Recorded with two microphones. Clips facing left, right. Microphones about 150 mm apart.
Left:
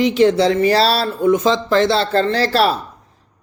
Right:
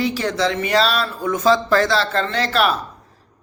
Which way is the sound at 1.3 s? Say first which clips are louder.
Left 1 dB; 20° left (ahead or behind).